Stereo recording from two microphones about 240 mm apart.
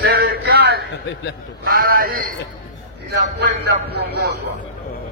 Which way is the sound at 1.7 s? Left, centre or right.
Right.